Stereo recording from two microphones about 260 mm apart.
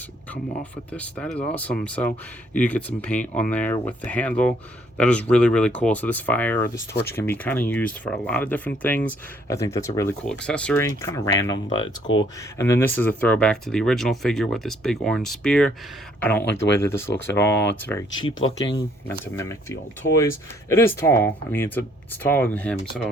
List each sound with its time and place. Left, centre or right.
0.6 s speech: centre
11.8 s speech: left
12.5 s speech: centre
18.5 s speech: left
19.2 s speech: centre